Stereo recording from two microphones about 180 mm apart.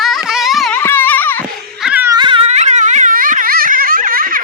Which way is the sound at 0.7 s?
10° left (ahead or behind).